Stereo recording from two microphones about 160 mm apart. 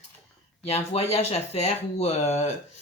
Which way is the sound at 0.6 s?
40° left (ahead or behind).